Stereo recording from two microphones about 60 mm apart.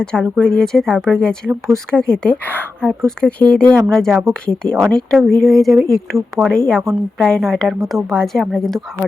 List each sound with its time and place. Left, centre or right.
0.0 s a woman's voice: centre